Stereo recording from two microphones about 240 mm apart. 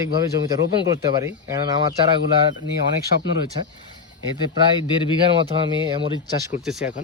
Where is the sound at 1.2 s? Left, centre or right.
Centre.